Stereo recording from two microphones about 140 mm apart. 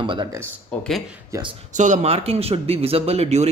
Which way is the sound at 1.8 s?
55° right (ahead or behind).